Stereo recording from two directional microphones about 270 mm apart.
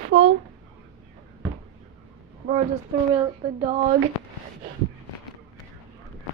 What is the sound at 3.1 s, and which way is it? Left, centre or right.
Speech, right.